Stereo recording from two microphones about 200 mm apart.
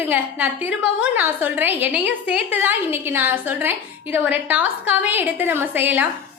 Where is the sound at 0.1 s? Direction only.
5° right (ahead or behind).